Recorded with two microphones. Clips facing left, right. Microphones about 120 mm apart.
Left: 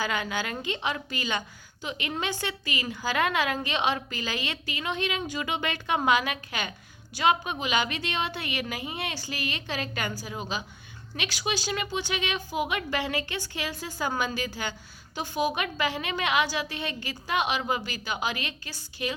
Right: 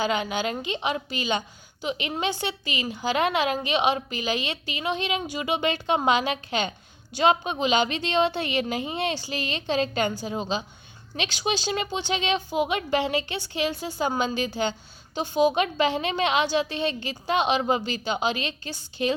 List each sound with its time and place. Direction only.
0.0 s a woman's voice: 20° right (ahead or behind)